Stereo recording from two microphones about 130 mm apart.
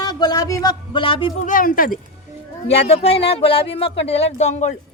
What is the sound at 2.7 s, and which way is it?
Speech, 50° left (ahead or behind).